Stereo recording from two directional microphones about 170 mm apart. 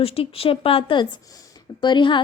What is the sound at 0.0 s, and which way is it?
A woman's voice, 35° left (ahead or behind).